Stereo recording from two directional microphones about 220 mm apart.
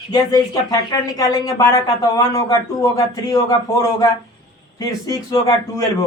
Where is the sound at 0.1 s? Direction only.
20° left (ahead or behind).